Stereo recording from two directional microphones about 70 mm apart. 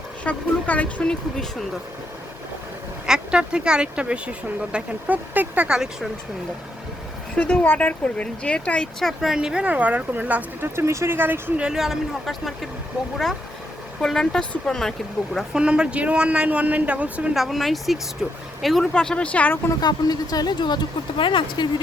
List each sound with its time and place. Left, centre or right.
0.3 s speech: left
3.1 s speech: centre
5.6 s speech: centre
7.3 s speech: left; by 9.3 s centre
9.3 s speech: centre
9.6 s speech: right
10.6 s speech: right
11.5 s speech: centre
11.8 s speech: centre
14.0 s speech: centre
15.5 s speech: centre
17.3 s speech: centre
18.9 s speech: centre
19.8 s speech: left